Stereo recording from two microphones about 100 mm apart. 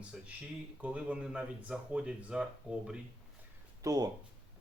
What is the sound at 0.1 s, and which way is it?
Speech, 10° right (ahead or behind).